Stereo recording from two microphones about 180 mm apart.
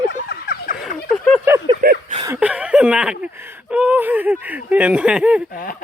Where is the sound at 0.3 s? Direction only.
60° left (ahead or behind).